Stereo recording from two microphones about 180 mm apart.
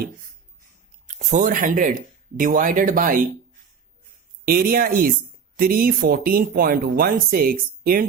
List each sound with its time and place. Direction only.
1.0 s speech: 40° right (ahead or behind)
4.4 s speech: 55° right (ahead or behind)